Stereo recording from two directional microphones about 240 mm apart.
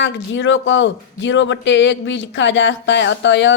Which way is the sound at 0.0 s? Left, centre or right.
Left.